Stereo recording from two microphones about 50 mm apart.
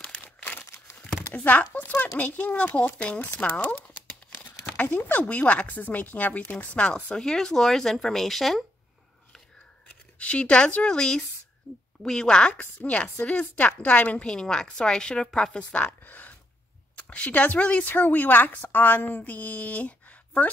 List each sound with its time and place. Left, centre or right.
0.0 s crumpling: left
1.3 s speech: left
3.4 s crumpling: left
4.9 s a woman's voice: left
7.2 s a woman's voice: centre
10.1 s a woman's voice: left
12.5 s speech: left
14.3 s a woman's voice: centre
16.0 s a sound: left
16.9 s speech: left
17.8 s a woman's voice: left